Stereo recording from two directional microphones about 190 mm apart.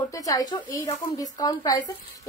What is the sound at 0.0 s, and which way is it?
A woman's voice, 20° left (ahead or behind).